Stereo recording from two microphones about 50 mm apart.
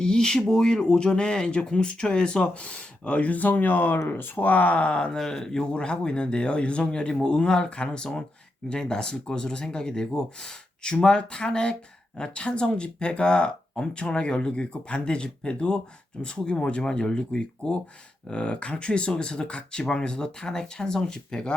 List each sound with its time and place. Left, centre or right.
0.0 s speech: centre
5.1 s speech: centre